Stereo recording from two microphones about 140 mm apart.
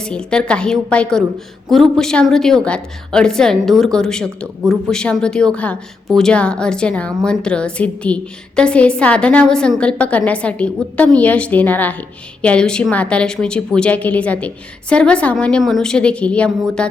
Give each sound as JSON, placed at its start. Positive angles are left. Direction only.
{"t": 0.0, "sound": "a woman's voice", "side_deg": 5}